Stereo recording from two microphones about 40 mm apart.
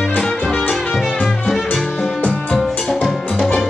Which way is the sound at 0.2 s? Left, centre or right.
Centre.